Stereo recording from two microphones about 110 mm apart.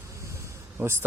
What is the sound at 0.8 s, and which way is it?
Speech, 20° right (ahead or behind).